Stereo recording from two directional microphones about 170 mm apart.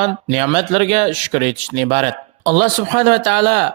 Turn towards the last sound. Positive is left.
turn(degrees=-50)  # may be behind; listen again after turning